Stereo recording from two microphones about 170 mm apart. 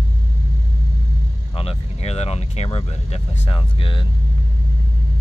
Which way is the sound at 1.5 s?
35° left (ahead or behind).